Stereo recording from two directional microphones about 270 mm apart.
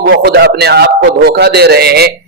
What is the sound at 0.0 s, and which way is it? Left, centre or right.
A man's voice, right.